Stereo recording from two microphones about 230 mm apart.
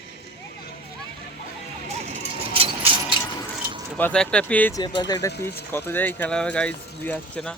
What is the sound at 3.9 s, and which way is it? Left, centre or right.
Speech, centre.